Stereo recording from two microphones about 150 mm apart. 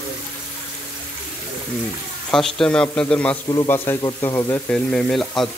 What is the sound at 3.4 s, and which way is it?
Speech, 25° left (ahead or behind).